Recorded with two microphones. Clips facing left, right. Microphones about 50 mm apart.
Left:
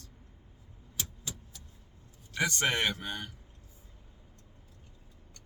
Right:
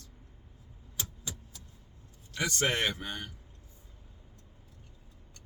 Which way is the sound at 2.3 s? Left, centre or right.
Centre.